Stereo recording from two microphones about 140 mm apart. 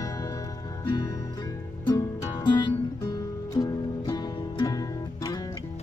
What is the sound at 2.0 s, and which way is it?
Music, 30° left (ahead or behind).